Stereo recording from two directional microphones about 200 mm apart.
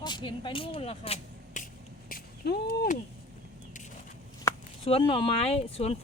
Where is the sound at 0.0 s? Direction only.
20° left (ahead or behind); by 3.9 s 40° left (ahead or behind).